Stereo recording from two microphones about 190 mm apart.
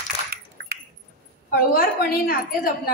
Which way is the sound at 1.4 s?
50° left (ahead or behind).